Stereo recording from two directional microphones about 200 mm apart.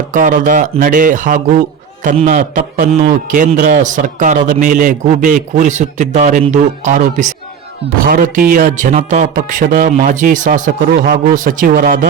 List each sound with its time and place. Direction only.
0.1 s speech: 40° right (ahead or behind)